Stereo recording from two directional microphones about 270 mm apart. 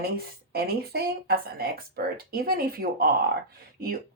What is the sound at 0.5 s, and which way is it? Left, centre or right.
Speech, right.